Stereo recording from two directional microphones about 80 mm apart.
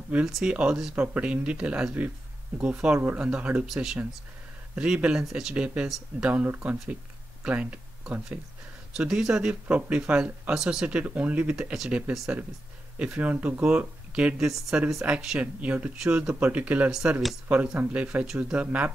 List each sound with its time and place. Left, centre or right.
0.3 s speech: centre
3.6 s speech: centre
13.0 s speech: centre